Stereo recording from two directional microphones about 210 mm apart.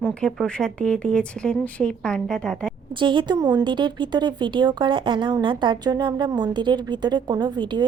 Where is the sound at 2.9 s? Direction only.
20° right (ahead or behind).